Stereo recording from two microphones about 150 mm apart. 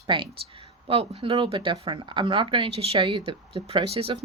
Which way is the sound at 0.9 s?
40° right (ahead or behind).